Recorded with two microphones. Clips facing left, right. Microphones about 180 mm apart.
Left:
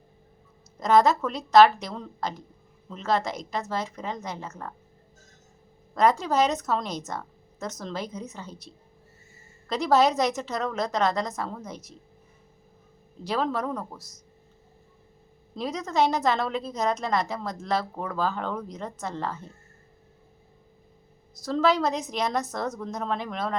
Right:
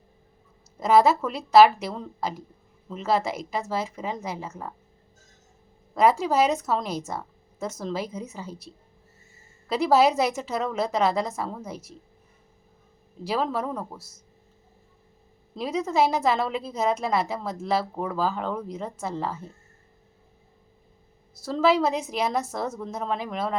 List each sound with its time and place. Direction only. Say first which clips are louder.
0.8 s a woman's voice: right 1 dB; 10° right (ahead or behind)
5.9 s a woman's voice: right 2 dB; 10° right (ahead or behind)
13.2 s a woman's voice: right 1 dB; 5° right (ahead or behind)
15.5 s a woman's voice: right 2 dB; 5° right (ahead or behind)
21.4 s a woman's voice: right 2 dB; 5° right (ahead or behind)